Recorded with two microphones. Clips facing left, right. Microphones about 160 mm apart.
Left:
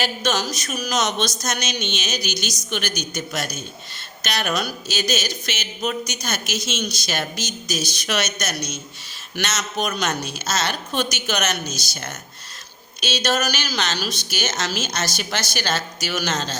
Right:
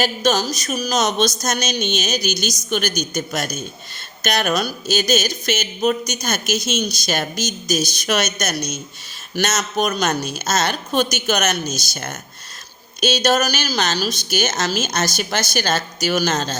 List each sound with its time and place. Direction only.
0.0 s speech: 40° right (ahead or behind)